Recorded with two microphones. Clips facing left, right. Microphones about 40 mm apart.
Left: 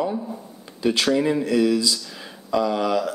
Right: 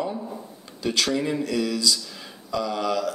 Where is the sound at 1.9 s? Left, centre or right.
Centre.